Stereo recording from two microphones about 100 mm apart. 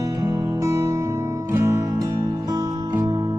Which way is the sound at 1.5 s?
30° right (ahead or behind).